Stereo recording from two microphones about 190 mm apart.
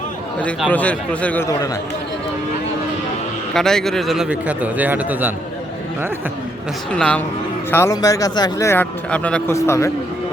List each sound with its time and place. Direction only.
0.7 s speech: 5° left (ahead or behind)
3.5 s a man's voice: centre (ahead or behind)
6.9 s a man's voice: 5° left (ahead or behind)